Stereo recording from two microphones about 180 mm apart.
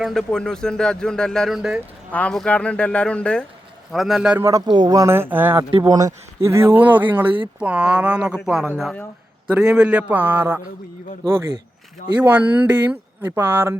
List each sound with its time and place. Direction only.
0.0 s speech: centre (ahead or behind)
4.4 s speech: 20° right (ahead or behind)
5.7 s speech: 20° right (ahead or behind)
12.2 s speech: 10° right (ahead or behind)